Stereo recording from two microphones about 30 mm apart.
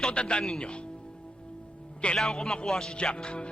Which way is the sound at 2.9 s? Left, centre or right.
Left.